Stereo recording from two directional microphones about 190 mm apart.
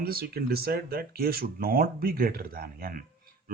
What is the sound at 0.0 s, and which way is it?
Speech, 55° right (ahead or behind).